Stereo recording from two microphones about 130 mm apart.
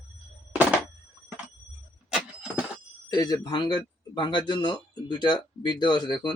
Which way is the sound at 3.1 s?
30° left (ahead or behind).